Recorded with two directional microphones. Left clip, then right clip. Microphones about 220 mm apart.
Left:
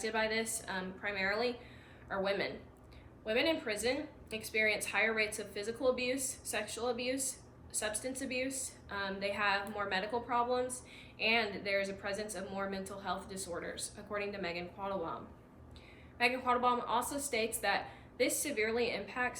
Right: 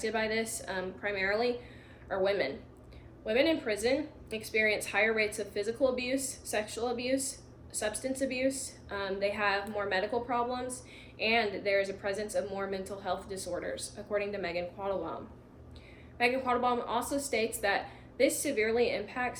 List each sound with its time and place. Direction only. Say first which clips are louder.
0.0 s a woman's voice: right 3 dB; 15° left (ahead or behind)
4.3 s speech: right 3 dB; 30° right (ahead or behind)
4.5 s a woman's voice: right 3 dB; 15° left (ahead or behind)
7.1 s a sound: right 5 dB; 30° right (ahead or behind)
7.8 s a woman's voice: right 6 dB; 15° left (ahead or behind)